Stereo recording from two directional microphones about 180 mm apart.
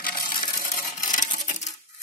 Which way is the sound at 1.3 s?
40° left (ahead or behind).